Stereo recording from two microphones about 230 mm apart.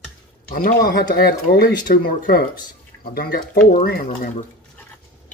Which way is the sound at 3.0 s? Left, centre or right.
Left.